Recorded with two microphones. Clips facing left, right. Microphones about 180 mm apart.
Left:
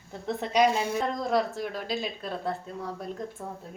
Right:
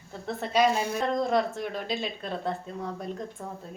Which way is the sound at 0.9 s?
Centre (ahead or behind).